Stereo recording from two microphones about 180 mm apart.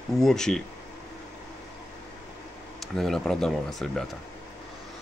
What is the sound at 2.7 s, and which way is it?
Speech, centre (ahead or behind).